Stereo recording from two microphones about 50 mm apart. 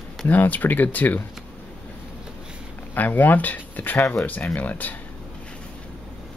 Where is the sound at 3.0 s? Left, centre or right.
Left.